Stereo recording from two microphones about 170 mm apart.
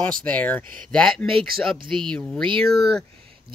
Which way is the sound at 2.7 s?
70° right (ahead or behind).